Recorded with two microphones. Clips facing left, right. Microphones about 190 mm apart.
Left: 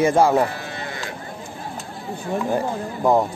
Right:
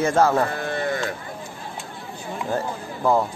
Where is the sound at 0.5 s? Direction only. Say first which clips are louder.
Right 7 dB; 50° right (ahead or behind).